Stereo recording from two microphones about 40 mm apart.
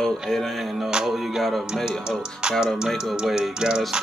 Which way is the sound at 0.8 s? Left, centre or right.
Centre.